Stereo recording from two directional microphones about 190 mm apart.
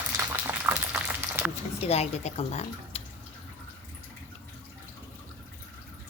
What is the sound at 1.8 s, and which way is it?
Speech, 35° left (ahead or behind).